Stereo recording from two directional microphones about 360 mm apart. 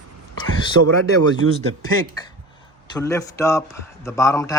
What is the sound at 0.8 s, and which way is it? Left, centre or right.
Speech, right.